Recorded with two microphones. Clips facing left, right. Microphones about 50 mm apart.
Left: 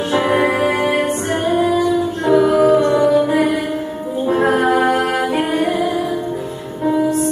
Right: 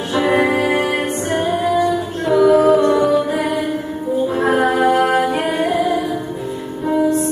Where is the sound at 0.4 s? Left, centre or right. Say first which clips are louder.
Even; centre.